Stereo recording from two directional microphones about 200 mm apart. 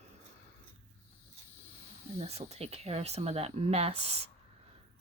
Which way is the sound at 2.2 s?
30° right (ahead or behind).